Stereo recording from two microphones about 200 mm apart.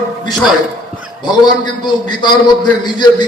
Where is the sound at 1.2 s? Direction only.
20° left (ahead or behind).